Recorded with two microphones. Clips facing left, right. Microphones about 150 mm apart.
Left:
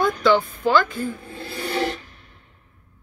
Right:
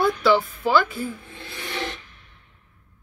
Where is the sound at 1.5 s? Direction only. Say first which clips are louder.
Left 7 dB; 40° left (ahead or behind).